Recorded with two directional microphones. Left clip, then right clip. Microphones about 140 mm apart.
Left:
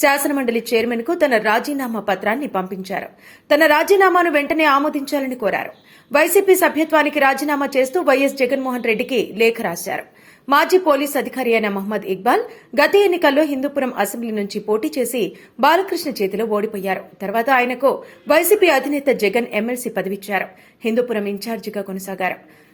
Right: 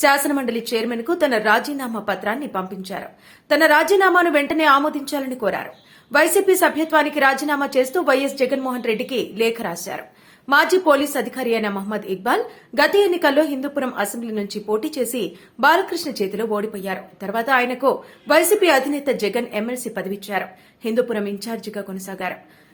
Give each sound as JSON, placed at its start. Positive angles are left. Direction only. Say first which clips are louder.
{"t": 0.0, "sound": "a woman's voice", "louder": "left 1 dB", "side_deg": 15}